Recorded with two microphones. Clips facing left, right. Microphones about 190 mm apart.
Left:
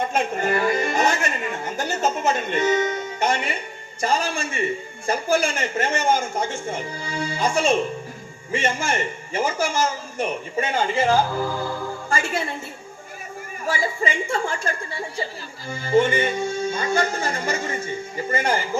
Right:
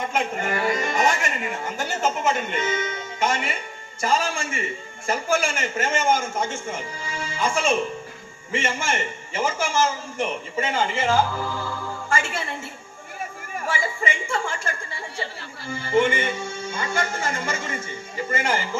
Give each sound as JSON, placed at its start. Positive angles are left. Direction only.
{"t": 0.1, "sound": "music", "side_deg": 40}
{"t": 1.2, "sound": "a man's voice", "side_deg": 40}
{"t": 13.7, "sound": "speech", "side_deg": 35}
{"t": 15.7, "sound": "speech", "side_deg": 35}